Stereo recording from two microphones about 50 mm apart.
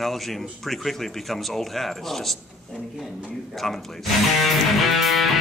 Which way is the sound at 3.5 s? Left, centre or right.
Centre.